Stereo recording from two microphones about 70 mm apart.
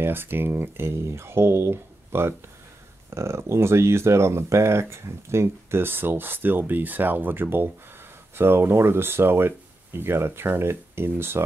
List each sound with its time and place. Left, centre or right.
0.0 s speech: right